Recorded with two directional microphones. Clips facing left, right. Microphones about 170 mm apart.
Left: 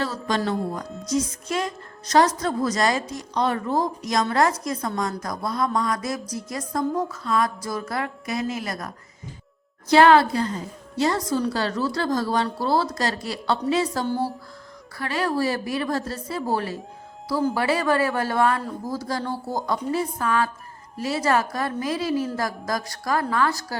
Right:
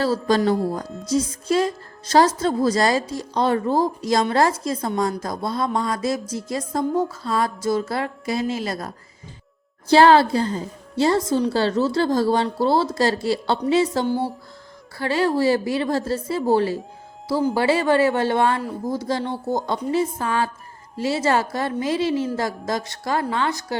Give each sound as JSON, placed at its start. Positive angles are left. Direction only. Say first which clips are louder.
{"t": 0.0, "sound": "a woman's voice", "louder": "right 6 dB", "side_deg": -35}